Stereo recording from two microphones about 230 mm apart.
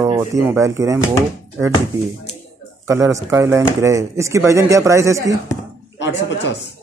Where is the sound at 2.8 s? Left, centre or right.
Centre.